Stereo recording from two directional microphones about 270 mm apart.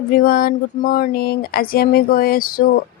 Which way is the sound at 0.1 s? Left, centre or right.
Left.